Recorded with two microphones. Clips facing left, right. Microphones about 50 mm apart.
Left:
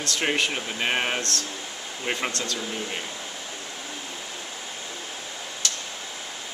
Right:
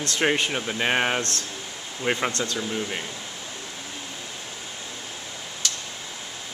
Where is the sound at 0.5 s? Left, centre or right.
Centre.